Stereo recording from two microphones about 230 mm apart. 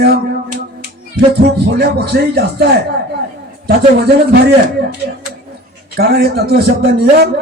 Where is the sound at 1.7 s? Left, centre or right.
Right.